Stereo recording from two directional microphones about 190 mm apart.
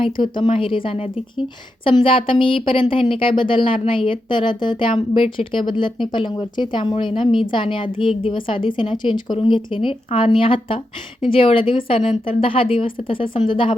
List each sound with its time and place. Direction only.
0.0 s speech: 25° left (ahead or behind)